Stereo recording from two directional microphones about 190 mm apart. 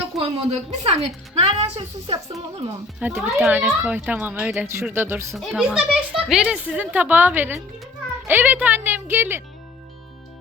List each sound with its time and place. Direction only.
0.2 s a woman's voice: 30° right (ahead or behind)
3.0 s a woman's voice: 10° right (ahead or behind)